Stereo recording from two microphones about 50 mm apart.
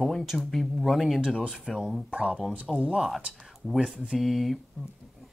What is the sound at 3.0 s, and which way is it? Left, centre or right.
Speech, centre.